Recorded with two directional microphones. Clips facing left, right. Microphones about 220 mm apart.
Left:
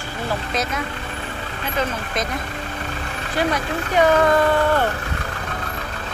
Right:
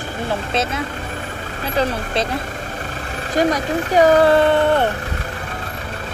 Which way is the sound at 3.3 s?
40° right (ahead or behind).